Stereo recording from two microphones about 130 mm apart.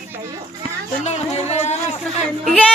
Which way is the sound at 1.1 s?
55° left (ahead or behind).